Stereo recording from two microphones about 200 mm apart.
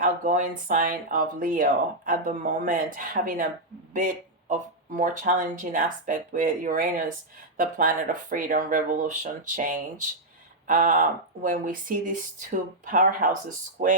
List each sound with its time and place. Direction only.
0.0 s speech: 40° right (ahead or behind)